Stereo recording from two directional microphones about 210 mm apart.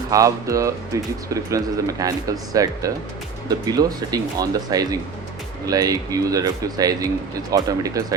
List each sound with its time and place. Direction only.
0.1 s speech: 15° right (ahead or behind)